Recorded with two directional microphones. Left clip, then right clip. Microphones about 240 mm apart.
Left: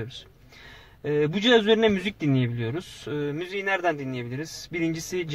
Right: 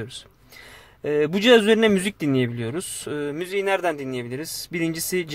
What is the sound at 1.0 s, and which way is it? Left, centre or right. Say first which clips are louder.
Speech: right 5 dB; right.